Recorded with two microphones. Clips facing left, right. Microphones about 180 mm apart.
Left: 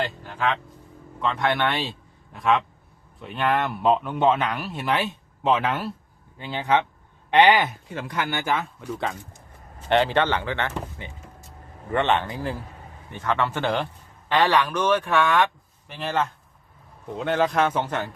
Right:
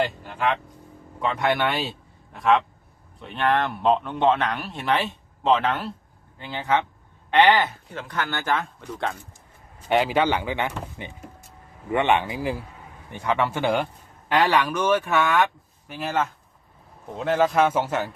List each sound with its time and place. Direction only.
0.0 s a sound: 10° right (ahead or behind)
1.2 s a man's voice: 10° right (ahead or behind)
9.9 s a man's voice: 5° right (ahead or behind)